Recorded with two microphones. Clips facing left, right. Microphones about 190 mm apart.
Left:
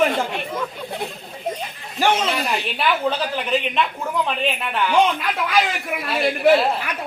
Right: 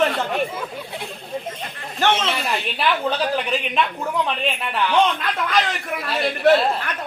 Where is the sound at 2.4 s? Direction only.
Centre (ahead or behind).